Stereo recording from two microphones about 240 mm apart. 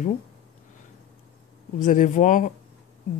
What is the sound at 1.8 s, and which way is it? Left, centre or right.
Speech, left.